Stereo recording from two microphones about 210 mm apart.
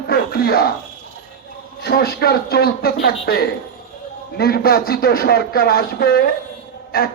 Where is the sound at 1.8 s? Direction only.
50° left (ahead or behind).